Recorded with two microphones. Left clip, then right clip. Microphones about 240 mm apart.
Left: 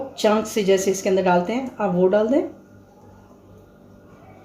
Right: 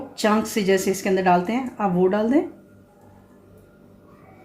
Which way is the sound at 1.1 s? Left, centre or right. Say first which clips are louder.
Right 1 dB; right.